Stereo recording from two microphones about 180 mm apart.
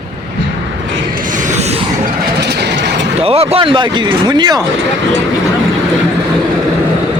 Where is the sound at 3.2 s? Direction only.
35° right (ahead or behind).